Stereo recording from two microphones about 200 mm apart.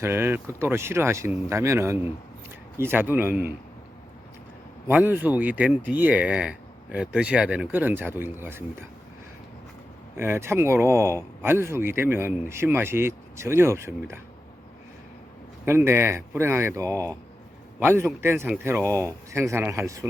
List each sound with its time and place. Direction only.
0.0 s speech: 10° right (ahead or behind)
4.9 s speech: 10° right (ahead or behind)
10.2 s speech: 10° right (ahead or behind)
15.6 s speech: 10° right (ahead or behind)